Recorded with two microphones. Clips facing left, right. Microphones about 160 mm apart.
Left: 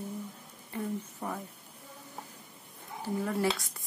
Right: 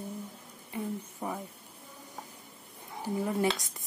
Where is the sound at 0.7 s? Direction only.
10° right (ahead or behind).